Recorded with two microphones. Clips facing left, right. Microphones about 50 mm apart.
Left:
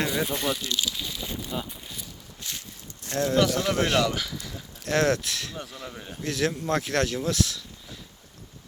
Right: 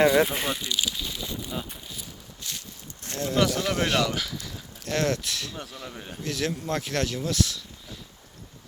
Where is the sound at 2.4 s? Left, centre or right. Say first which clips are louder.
Even; left.